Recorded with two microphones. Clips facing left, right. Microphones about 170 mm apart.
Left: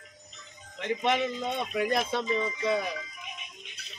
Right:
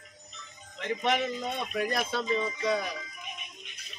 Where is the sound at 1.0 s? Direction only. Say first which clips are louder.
Left 1 dB; 20° left (ahead or behind).